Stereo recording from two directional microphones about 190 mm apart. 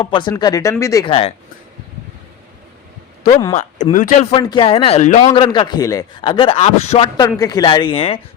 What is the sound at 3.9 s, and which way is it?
Speech, 45° left (ahead or behind).